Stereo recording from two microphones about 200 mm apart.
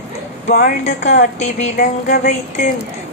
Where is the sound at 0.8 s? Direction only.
35° left (ahead or behind).